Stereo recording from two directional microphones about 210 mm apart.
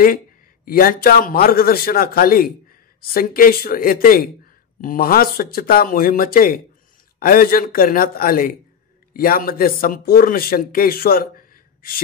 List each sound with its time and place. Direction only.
0.7 s speech: 45° left (ahead or behind)